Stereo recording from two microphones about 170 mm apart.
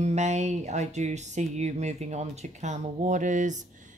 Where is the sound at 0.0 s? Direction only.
40° right (ahead or behind).